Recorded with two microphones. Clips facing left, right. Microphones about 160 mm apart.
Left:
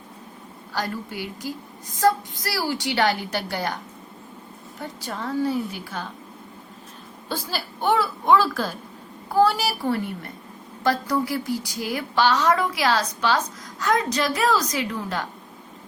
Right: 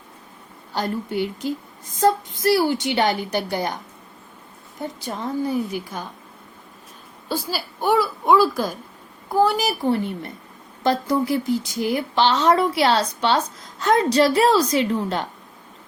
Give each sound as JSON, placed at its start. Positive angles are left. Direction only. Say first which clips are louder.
{"t": 0.7, "sound": "a woman's voice", "louder": "right 4 dB", "side_deg": -20}
{"t": 4.8, "sound": "a woman's voice", "louder": "right 3 dB", "side_deg": -20}
{"t": 7.3, "sound": "a woman's voice", "louder": "right 3 dB", "side_deg": -10}